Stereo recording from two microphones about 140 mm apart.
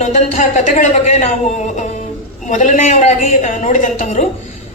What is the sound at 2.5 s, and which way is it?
A man's voice, 60° left (ahead or behind).